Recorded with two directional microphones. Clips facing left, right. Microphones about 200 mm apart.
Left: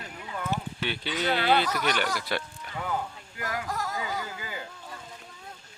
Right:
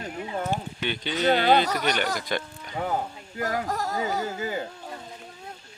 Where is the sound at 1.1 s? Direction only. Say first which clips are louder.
Right 5 dB; 45° right (ahead or behind).